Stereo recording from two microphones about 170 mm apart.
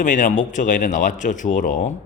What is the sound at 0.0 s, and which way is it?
A man's voice, 50° left (ahead or behind).